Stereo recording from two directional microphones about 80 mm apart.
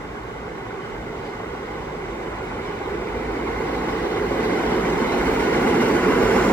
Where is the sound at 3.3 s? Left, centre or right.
Left.